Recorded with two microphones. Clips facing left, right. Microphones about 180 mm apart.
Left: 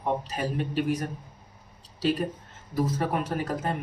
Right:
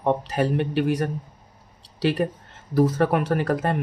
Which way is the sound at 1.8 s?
70° right (ahead or behind).